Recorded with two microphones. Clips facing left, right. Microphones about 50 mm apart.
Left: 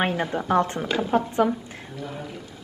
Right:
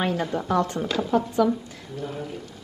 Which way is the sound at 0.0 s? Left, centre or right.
Left.